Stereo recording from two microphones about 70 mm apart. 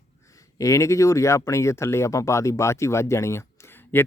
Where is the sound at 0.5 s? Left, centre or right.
Left.